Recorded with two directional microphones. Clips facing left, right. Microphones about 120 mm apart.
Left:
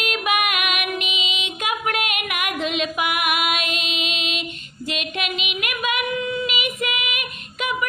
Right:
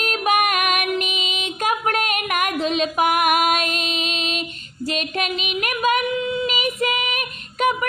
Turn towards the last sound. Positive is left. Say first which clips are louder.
# right 7 dB
turn(degrees=-40)  # may be behind; listen again after turning